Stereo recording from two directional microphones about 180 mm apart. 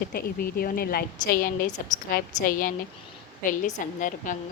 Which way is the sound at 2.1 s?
50° left (ahead or behind).